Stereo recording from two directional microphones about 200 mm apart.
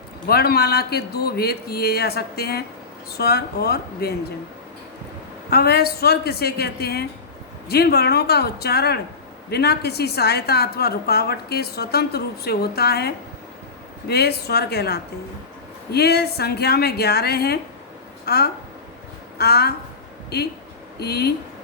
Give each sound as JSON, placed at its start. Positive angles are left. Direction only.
{"t": 0.3, "sound": "a woman's voice", "side_deg": 50}
{"t": 5.5, "sound": "a woman's voice", "side_deg": 50}